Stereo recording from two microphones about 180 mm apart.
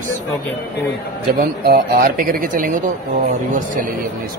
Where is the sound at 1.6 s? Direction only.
50° right (ahead or behind).